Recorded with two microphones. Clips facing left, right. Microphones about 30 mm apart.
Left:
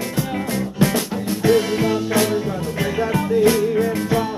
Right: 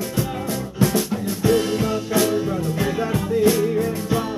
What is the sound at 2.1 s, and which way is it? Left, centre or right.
Music, left.